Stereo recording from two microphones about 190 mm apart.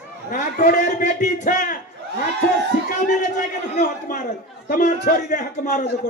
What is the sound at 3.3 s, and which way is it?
A man's voice, 45° left (ahead or behind).